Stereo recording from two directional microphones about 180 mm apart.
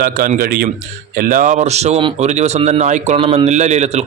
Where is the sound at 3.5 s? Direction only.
40° right (ahead or behind).